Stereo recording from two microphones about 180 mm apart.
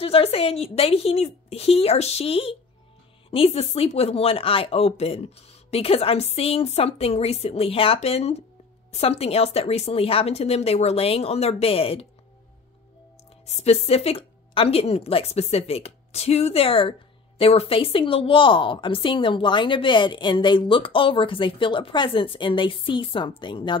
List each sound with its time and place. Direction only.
0.0 s speech: 35° left (ahead or behind)
13.5 s a woman's voice: 35° left (ahead or behind)